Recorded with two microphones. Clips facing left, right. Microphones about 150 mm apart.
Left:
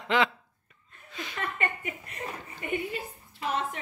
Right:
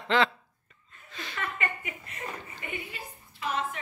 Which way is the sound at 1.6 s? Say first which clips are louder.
Left 2 dB; 40° left (ahead or behind).